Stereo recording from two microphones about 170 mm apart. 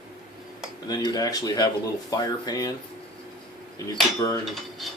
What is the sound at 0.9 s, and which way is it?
Speech, 25° left (ahead or behind).